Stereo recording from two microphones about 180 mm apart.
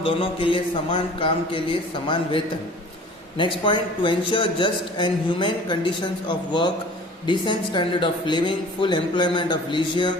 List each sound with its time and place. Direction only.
0.0 s a man's voice: 30° left (ahead or behind)
3.3 s a man's voice: 25° left (ahead or behind)